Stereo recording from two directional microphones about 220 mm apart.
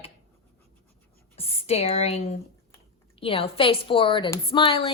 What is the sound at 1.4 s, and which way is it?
A woman's voice, 30° left (ahead or behind).